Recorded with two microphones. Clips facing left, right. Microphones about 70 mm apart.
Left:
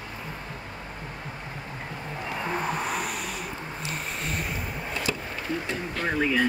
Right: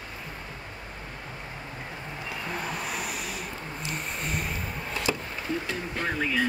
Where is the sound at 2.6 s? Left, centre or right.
Centre.